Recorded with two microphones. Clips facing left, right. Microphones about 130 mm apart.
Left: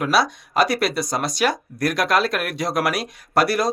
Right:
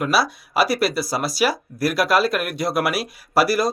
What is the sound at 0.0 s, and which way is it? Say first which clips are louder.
Speech: left 1 dB; 5° right (ahead or behind).